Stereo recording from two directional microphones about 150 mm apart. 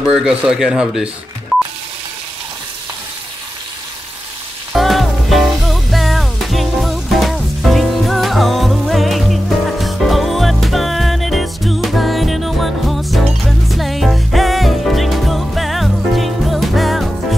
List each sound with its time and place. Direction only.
0.0 s speech: 5° right (ahead or behind)
4.7 s music: centre (ahead or behind)